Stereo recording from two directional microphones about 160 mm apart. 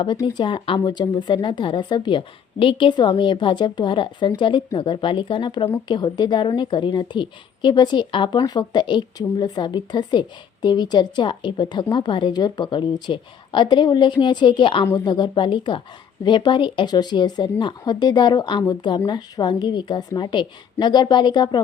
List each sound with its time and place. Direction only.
0.0 s a woman's voice: 25° left (ahead or behind)